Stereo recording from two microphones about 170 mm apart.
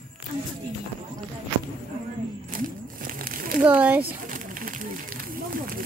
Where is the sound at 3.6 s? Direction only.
10° right (ahead or behind).